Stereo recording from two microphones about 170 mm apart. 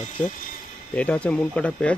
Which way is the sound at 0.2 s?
5° left (ahead or behind).